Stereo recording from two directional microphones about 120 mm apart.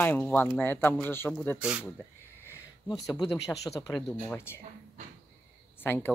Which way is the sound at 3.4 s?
25° left (ahead or behind).